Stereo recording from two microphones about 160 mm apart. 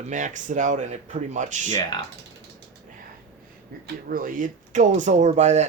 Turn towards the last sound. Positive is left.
turn(degrees=-45)  # may be behind; listen again after turning